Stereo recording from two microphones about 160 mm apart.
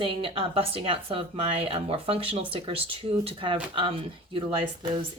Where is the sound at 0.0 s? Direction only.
35° right (ahead or behind).